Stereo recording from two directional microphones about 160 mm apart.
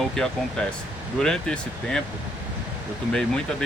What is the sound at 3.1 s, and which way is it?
Speech, 5° left (ahead or behind).